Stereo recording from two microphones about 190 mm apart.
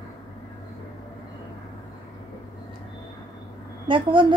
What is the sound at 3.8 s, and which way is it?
Speech, 25° right (ahead or behind).